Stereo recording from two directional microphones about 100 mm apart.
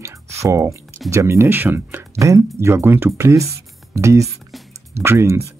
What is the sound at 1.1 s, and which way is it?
Speech, 30° right (ahead or behind).